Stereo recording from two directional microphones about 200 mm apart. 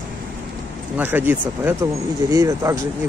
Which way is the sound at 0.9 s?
10° right (ahead or behind).